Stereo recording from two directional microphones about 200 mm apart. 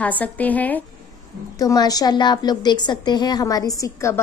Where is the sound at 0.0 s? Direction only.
10° left (ahead or behind).